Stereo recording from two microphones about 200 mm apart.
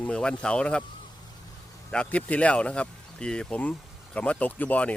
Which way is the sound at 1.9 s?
5° left (ahead or behind).